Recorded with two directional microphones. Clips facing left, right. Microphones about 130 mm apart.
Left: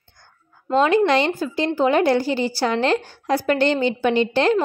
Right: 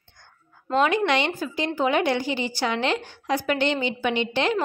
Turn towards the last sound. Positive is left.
turn(degrees=35)  # may be behind; listen again after turning